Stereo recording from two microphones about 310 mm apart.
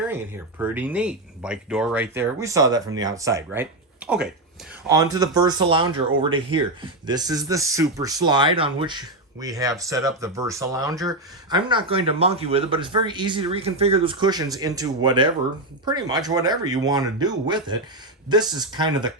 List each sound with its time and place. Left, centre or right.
0.6 s speech: centre